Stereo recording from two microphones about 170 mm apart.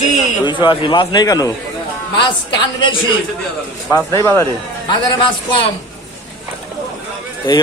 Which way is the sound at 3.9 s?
15° left (ahead or behind).